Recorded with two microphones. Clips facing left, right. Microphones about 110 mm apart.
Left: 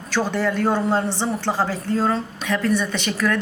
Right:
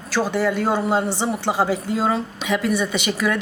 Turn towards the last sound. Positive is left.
turn(degrees=-10)  # may be behind; listen again after turning